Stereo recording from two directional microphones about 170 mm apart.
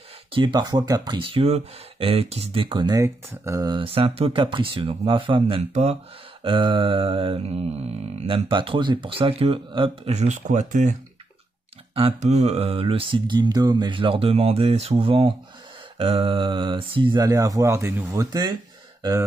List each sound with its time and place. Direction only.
0.3 s mantra: 25° right (ahead or behind)
3.0 s mantra: 20° right (ahead or behind)
16.0 s speech: 30° right (ahead or behind)